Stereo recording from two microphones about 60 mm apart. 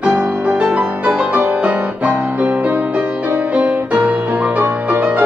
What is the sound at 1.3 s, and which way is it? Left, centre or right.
Music, right.